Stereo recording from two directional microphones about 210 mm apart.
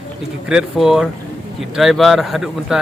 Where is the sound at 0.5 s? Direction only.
Centre (ahead or behind).